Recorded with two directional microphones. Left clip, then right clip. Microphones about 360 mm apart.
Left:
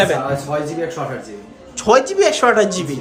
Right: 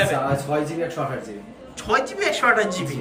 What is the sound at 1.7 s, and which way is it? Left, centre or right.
Speech, centre.